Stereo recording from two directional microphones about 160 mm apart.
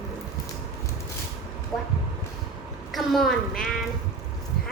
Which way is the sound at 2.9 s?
Centre (ahead or behind).